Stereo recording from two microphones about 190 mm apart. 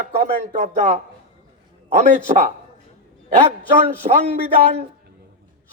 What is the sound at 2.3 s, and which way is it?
Speech, 45° right (ahead or behind).